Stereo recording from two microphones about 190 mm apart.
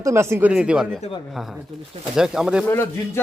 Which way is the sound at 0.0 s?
15° right (ahead or behind).